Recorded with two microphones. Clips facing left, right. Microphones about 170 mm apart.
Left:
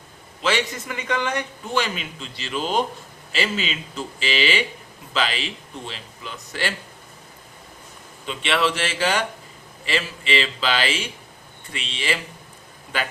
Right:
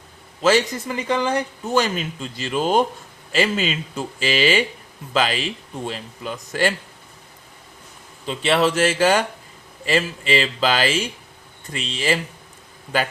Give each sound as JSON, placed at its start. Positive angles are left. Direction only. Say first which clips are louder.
{"t": 0.4, "sound": "a man's voice", "louder": "right 6 dB", "side_deg": -35}
{"t": 8.3, "sound": "a man's voice", "louder": "right 4 dB", "side_deg": -40}